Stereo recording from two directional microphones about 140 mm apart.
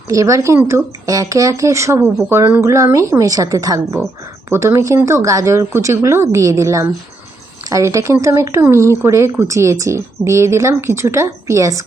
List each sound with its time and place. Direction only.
0.1 s speech: 20° right (ahead or behind)